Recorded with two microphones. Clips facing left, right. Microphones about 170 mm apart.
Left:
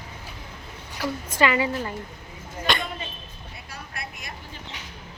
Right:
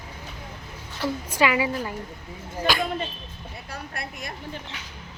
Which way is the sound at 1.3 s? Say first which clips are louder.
Left 1 dB; 10° right (ahead or behind).